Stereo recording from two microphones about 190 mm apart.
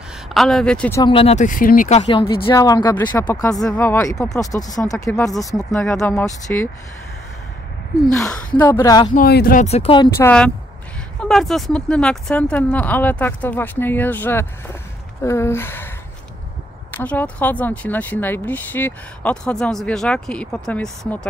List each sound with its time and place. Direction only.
0.3 s speech: centre (ahead or behind)
1.0 s speech: 30° left (ahead or behind)
2.0 s speech: 25° left (ahead or behind)
5.8 s speech: 5° left (ahead or behind)
8.5 s speech: 10° left (ahead or behind)
9.1 s speech: 50° left (ahead or behind)
9.7 s speech: 30° left (ahead or behind)
10.1 s speech: 10° left (ahead or behind)
16.9 s speech: 10° left (ahead or behind)